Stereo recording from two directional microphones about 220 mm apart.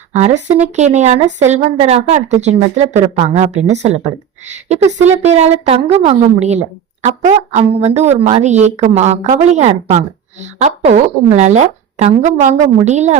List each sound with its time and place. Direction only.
0.1 s a woman's voice: 30° right (ahead or behind)